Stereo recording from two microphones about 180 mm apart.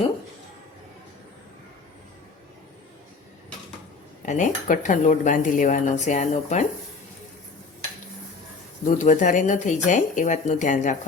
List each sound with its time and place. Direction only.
4.3 s speech: 45° left (ahead or behind)
9.0 s speech: 45° left (ahead or behind)